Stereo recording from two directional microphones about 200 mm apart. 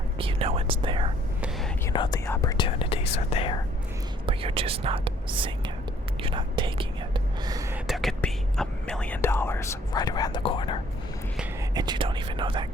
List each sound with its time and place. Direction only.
0.2 s whispering: 25° right (ahead or behind)
1.9 s speech: 20° left (ahead or behind)
4.3 s speech: 30° right (ahead or behind)
6.2 s whispering: 25° right (ahead or behind)
7.9 s whispering: centre (ahead or behind); by 10.8 s 25° left (ahead or behind)
11.7 s whispering: 20° right (ahead or behind)